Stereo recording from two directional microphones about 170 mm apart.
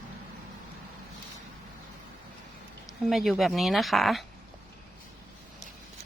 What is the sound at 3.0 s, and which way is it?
A woman's voice, centre (ahead or behind).